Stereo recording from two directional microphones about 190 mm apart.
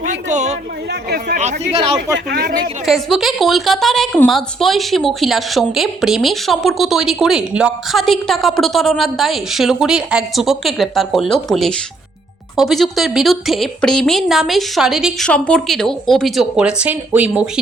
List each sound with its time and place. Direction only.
0.0 s a sound: 40° right (ahead or behind)
2.1 s speech: 55° right (ahead or behind)
2.8 s speech: centre (ahead or behind)